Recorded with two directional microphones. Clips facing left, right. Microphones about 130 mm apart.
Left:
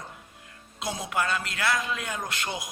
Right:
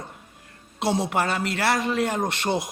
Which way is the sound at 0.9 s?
30° right (ahead or behind).